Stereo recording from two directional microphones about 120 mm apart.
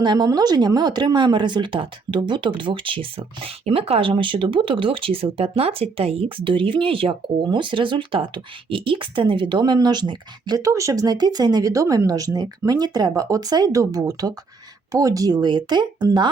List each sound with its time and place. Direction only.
0.0 s speech: 35° right (ahead or behind)